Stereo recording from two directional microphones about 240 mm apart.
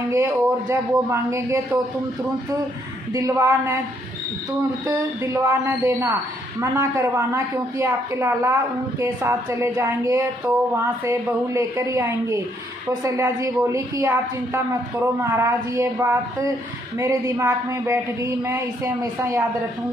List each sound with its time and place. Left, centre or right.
0.1 s speech: centre
3.1 s speech: centre
4.8 s speech: centre